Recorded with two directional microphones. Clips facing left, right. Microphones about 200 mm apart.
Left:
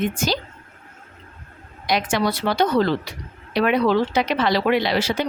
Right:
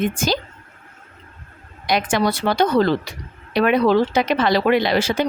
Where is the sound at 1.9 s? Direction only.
50° right (ahead or behind).